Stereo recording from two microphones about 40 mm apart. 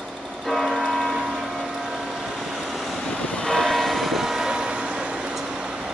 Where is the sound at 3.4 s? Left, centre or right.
Centre.